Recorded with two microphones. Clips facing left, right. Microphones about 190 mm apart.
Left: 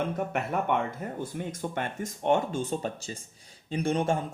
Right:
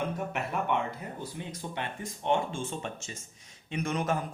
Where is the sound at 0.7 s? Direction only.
50° left (ahead or behind).